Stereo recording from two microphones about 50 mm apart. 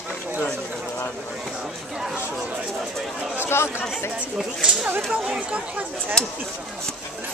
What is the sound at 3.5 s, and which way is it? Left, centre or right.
Speech, left.